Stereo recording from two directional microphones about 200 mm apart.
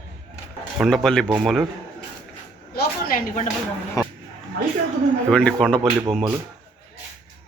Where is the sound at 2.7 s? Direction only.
50° left (ahead or behind).